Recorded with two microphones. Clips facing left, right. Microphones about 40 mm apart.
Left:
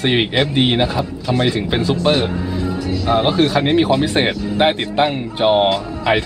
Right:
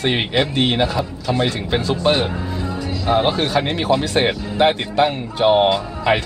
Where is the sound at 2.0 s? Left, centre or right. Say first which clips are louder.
Left 1 dB; centre.